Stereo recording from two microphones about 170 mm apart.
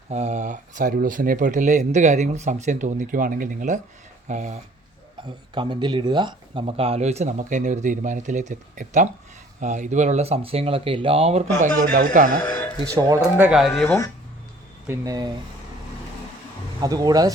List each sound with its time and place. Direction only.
0.1 s speech: 40° right (ahead or behind)
5.1 s speech: 25° right (ahead or behind); by 12.4 s 50° right (ahead or behind)
12.4 s speech: 10° left (ahead or behind)
12.9 s speech: 20° right (ahead or behind)
13.4 s speech: 5° right (ahead or behind)
13.8 s speech: 15° left (ahead or behind)
14.8 s speech: 20° right (ahead or behind)
16.8 s speech: 20° right (ahead or behind)